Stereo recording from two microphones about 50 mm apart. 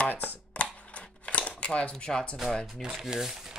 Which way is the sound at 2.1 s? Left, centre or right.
Centre.